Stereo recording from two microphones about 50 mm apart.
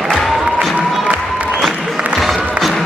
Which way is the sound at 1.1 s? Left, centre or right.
Right.